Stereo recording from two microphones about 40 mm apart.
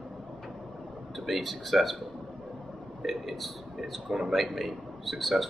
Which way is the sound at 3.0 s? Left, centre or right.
Centre.